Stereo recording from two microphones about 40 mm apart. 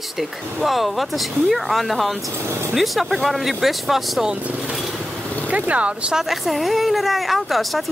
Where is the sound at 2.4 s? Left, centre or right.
Right.